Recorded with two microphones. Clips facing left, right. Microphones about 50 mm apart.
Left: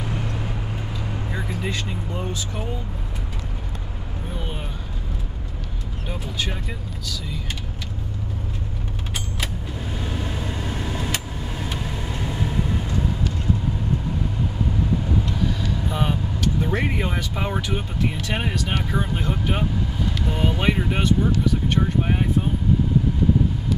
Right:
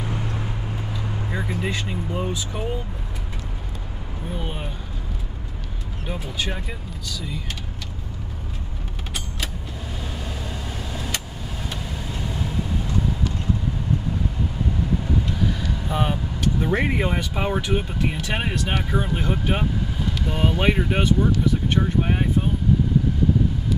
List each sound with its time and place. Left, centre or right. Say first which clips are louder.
1.3 s speech: right 2 dB; centre
4.4 s vehicle: right 1 dB; centre
6.0 s speech: right 1 dB; centre
10.0 s vehicle: left 4 dB; left
15.4 s vehicle: left 1 dB; centre
16.6 s speech: right 2 dB; centre